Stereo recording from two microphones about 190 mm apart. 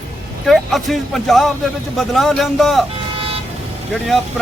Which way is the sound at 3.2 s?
30° right (ahead or behind).